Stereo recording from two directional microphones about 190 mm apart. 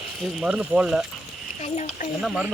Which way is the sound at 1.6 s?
35° left (ahead or behind).